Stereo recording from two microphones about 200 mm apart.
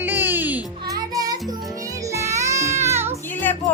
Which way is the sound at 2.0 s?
15° right (ahead or behind).